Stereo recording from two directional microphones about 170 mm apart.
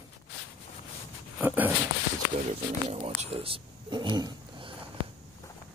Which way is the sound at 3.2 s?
35° right (ahead or behind).